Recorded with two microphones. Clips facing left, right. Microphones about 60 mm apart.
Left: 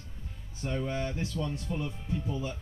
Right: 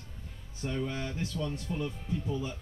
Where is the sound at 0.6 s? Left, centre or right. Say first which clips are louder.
Left 2 dB; centre.